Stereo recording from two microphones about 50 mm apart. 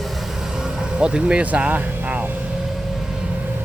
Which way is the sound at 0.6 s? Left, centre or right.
Centre.